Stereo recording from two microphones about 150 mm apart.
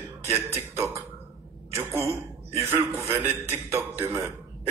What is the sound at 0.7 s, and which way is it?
A man's voice, 20° right (ahead or behind).